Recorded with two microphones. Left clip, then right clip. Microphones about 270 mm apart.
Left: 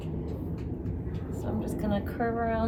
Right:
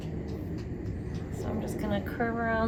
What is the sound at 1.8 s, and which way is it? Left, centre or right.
Speech, centre.